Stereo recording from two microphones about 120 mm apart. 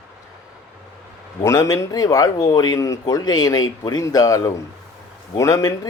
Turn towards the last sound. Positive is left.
turn(degrees=30)  # may be behind; listen again after turning